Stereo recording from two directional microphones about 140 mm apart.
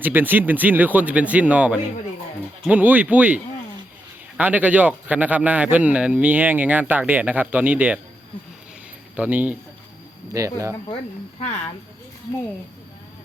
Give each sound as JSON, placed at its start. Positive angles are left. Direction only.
{"t": 0.0, "sound": "a man's voice", "side_deg": -15}
{"t": 9.1, "sound": "a man's voice", "side_deg": -10}
{"t": 10.3, "sound": "speech", "side_deg": -25}
{"t": 10.9, "sound": "speech", "side_deg": 45}